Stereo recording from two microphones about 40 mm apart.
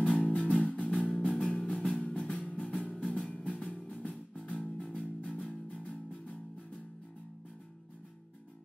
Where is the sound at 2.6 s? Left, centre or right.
Centre.